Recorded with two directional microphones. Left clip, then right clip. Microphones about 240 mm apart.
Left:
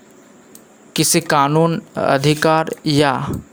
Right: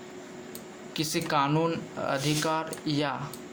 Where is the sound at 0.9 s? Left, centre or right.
Left.